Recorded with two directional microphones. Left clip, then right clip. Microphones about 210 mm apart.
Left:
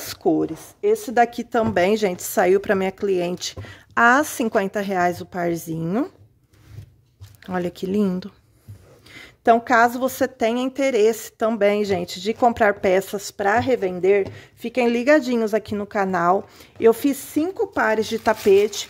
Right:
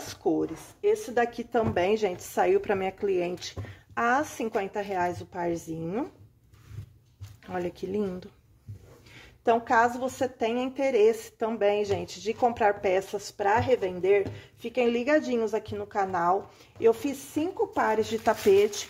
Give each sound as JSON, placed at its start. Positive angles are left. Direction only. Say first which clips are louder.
{"t": 0.0, "sound": "a woman's voice", "louder": "left 7 dB", "side_deg": 60}
{"t": 7.5, "sound": "a woman's voice", "louder": "left 7 dB", "side_deg": 50}
{"t": 17.8, "sound": "speech", "louder": "left 6 dB", "side_deg": 35}